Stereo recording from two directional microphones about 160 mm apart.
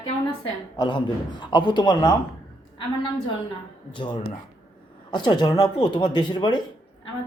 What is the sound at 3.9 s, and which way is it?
A woman's voice, 30° left (ahead or behind).